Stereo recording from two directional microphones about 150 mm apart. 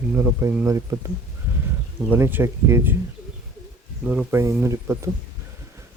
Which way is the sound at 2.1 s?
15° right (ahead or behind).